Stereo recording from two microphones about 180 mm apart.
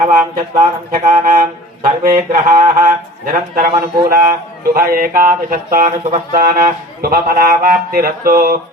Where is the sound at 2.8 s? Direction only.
50° right (ahead or behind).